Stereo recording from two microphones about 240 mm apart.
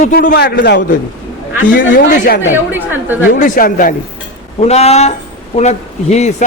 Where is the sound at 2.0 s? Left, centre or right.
Left.